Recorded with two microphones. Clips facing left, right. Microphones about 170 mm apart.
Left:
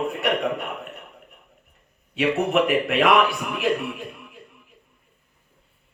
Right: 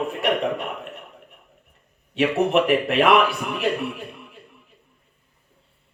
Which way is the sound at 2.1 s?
35° right (ahead or behind).